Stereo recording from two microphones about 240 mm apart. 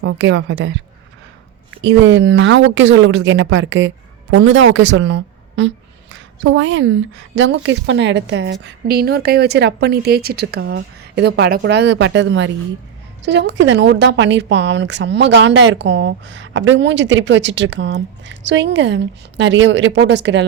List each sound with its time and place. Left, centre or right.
0.0 s a woman's voice: right
1.8 s a woman's voice: right